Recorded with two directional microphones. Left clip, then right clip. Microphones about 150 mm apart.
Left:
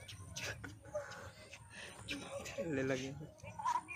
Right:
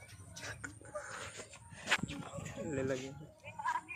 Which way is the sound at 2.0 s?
40° left (ahead or behind).